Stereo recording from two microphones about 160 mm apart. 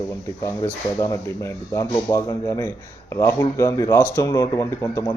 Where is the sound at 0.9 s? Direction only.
20° left (ahead or behind).